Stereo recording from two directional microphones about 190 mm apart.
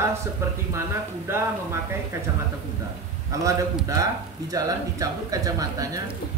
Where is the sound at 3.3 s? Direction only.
15° right (ahead or behind).